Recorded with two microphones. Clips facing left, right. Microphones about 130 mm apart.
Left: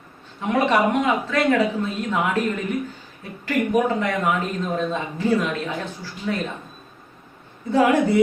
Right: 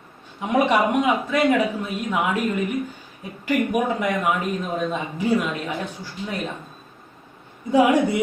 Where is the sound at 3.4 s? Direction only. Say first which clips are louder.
Left 1 dB; 10° right (ahead or behind).